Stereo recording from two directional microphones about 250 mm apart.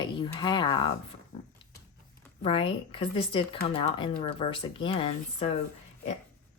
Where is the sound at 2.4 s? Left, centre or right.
Left.